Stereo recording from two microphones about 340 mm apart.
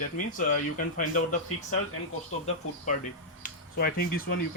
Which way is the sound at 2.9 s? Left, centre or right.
Left.